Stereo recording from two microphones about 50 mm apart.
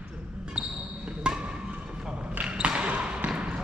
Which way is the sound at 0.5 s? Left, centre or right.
Centre.